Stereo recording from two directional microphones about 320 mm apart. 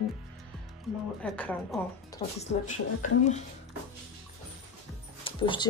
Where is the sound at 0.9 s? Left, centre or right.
Centre.